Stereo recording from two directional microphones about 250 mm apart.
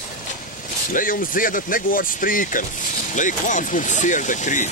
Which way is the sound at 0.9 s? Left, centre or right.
Left.